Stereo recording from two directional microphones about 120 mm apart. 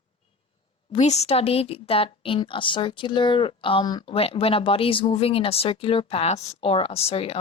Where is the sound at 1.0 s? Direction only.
65° left (ahead or behind); by 4.1 s 35° left (ahead or behind).